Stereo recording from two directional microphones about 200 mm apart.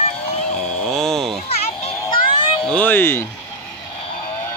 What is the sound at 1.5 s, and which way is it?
Children playing, 30° left (ahead or behind).